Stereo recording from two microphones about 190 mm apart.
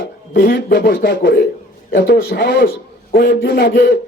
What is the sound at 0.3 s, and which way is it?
A man's voice, 55° left (ahead or behind).